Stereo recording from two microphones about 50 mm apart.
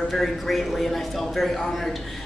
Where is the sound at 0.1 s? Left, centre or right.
Centre.